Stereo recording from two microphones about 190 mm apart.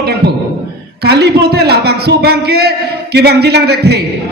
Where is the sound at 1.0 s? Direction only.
60° right (ahead or behind).